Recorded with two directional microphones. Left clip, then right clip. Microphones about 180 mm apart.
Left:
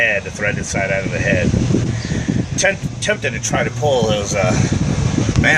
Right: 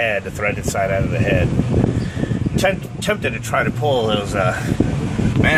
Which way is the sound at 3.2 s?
15° right (ahead or behind).